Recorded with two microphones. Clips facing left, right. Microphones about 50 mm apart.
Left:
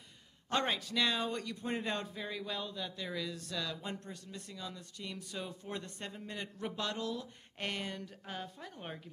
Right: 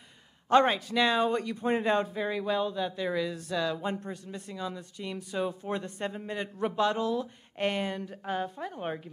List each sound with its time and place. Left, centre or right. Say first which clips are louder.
0.5 s speech: right 11 dB; centre